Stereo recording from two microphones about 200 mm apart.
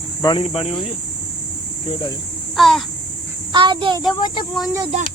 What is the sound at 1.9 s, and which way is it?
Speech, 25° left (ahead or behind).